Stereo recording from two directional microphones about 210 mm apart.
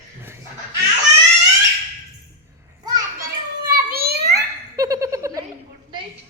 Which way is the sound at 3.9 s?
50° right (ahead or behind).